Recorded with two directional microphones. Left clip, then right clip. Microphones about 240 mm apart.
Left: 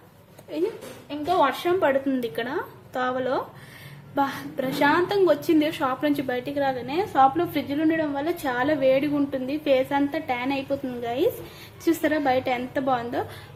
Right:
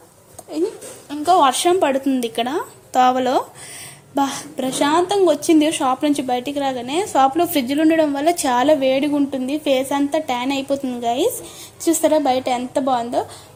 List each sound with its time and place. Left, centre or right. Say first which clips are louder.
1.4 s a woman's voice: right 4 dB; right